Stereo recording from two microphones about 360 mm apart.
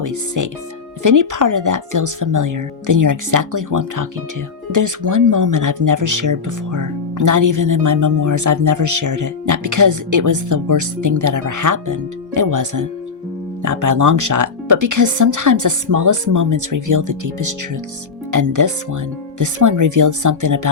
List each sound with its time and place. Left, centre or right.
0.0 s speech: right